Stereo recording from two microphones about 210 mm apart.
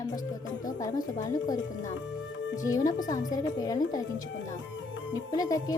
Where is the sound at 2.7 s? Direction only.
15° left (ahead or behind).